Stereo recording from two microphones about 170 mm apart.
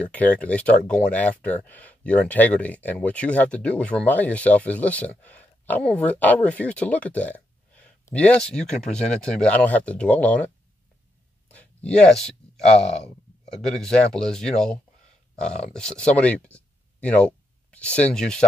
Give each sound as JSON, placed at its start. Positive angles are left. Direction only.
{"t": 0.0, "sound": "speech", "side_deg": 10}
{"t": 11.4, "sound": "a sound", "side_deg": 10}
{"t": 13.5, "sound": "speech", "side_deg": 5}